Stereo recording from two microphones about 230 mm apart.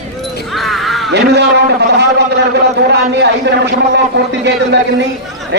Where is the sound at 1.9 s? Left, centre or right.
Right.